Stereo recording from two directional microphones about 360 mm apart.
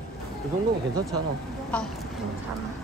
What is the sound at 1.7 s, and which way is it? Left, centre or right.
Speech, centre.